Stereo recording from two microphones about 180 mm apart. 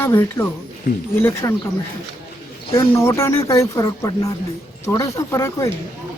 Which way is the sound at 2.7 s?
15° left (ahead or behind).